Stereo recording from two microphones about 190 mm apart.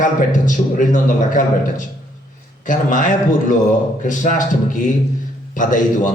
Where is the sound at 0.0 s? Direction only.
45° left (ahead or behind).